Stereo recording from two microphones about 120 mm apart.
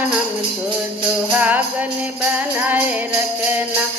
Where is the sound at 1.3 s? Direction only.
15° right (ahead or behind).